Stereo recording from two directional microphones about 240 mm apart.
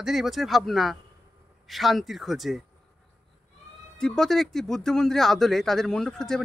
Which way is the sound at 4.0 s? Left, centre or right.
Centre.